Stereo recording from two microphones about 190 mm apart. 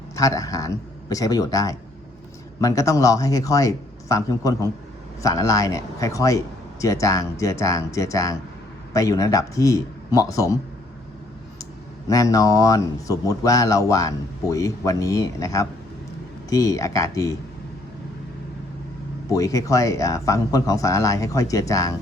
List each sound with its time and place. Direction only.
0.2 s speech: 20° left (ahead or behind)
12.0 s speech: 20° left (ahead or behind)
19.3 s speech: 15° left (ahead or behind)